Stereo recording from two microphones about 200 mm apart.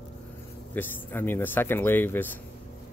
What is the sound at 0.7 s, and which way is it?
Speech, 10° left (ahead or behind).